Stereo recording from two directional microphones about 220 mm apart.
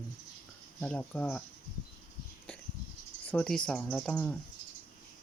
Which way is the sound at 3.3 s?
5° left (ahead or behind).